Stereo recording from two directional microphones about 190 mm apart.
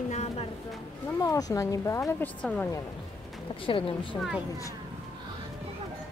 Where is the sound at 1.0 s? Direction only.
15° left (ahead or behind).